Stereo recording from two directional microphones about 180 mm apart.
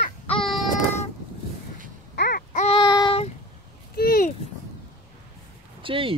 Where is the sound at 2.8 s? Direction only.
25° left (ahead or behind).